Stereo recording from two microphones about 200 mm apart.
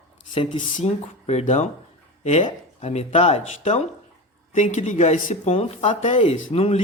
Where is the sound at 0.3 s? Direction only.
30° left (ahead or behind).